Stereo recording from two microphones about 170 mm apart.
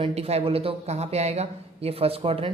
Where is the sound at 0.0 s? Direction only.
40° right (ahead or behind).